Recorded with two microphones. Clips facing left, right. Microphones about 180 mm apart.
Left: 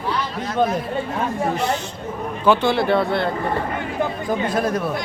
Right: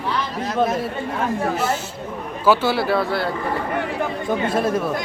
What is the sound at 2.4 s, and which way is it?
Speech, 5° right (ahead or behind).